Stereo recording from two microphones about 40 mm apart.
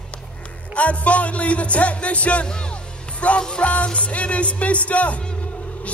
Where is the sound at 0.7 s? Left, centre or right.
Left.